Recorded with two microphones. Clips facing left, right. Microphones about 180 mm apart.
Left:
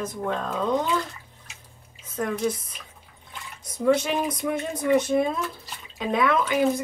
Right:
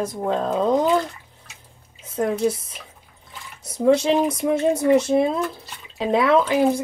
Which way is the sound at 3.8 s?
30° right (ahead or behind).